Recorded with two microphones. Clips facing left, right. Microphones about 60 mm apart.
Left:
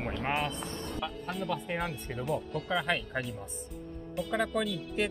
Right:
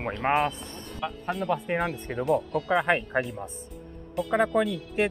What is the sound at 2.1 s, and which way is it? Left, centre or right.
Speech, right.